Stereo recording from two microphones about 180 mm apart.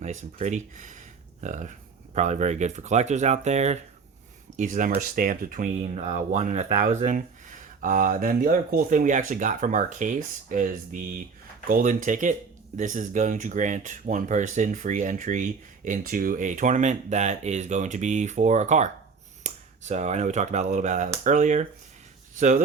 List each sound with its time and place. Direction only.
0.0 s speech: 40° right (ahead or behind)